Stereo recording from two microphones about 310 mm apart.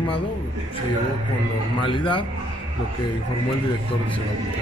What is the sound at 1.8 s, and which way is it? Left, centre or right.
Speech, centre.